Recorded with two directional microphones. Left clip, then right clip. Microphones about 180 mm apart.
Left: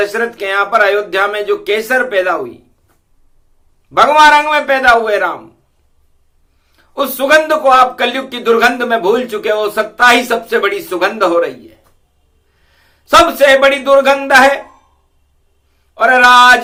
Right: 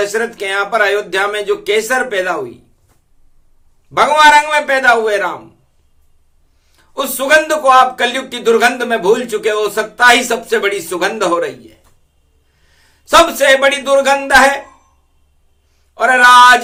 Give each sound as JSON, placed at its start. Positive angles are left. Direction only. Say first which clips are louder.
{"t": 0.0, "sound": "speech", "louder": "left 1 dB", "side_deg": -15}
{"t": 3.9, "sound": "speech", "louder": "left 1 dB", "side_deg": -15}
{"t": 6.7, "sound": "a sound", "louder": "left 3 dB", "side_deg": -15}
{"t": 7.2, "sound": "a man's voice", "louder": "left 1 dB", "side_deg": -15}
{"t": 16.0, "sound": "speech", "louder": "even", "side_deg": -15}